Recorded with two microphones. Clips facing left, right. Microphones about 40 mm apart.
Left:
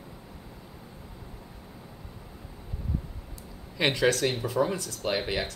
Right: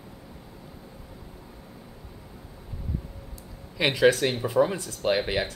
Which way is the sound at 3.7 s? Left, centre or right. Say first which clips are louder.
Right 1 dB; centre.